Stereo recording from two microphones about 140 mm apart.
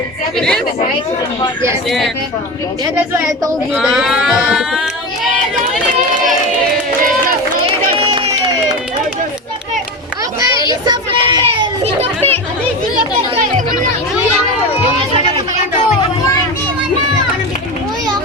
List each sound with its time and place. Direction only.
0.3 s speech: 5° left (ahead or behind)
2.9 s a woman's voice: 20° right (ahead or behind)
3.8 s speech: 5° right (ahead or behind)
7.9 s crowd: 40° right (ahead or behind)
10.8 s a sound: 35° right (ahead or behind)
11.9 s chatter: 50° right (ahead or behind)